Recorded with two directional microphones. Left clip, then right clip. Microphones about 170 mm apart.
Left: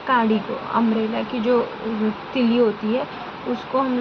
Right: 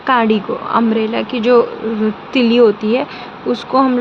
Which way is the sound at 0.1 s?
70° right (ahead or behind).